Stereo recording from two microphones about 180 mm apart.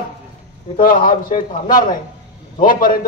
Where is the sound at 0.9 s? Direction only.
50° left (ahead or behind).